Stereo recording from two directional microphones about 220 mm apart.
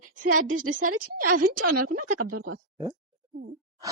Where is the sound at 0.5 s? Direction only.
65° right (ahead or behind).